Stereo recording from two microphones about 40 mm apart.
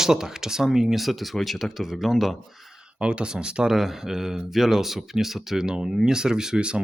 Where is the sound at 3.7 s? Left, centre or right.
Centre.